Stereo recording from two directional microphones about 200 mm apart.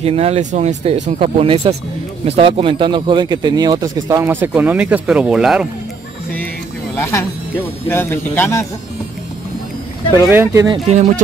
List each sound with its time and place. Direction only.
0.0 s speech: 30° right (ahead or behind); by 5.7 s centre (ahead or behind)
7.0 s speech: 15° left (ahead or behind)
10.2 s speech: 10° right (ahead or behind)